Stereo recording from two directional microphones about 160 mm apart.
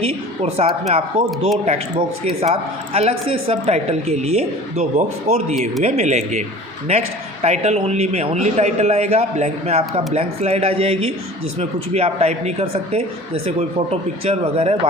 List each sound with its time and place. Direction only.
0.0 s a man's voice: 40° right (ahead or behind)
7.4 s a man's voice: 45° right (ahead or behind)